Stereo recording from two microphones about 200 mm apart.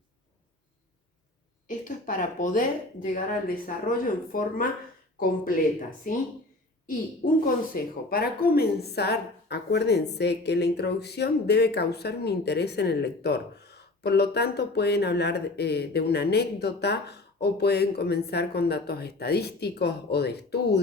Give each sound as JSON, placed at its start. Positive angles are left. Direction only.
{"t": 1.6, "sound": "a woman's voice", "side_deg": 40}
{"t": 6.8, "sound": "speech", "side_deg": 45}